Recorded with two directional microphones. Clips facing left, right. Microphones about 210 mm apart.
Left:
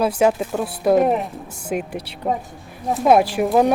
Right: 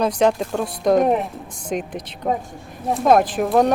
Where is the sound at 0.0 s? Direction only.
5° left (ahead or behind).